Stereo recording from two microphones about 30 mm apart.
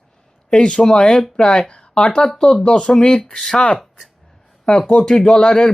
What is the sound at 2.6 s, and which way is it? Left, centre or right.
Speech, left.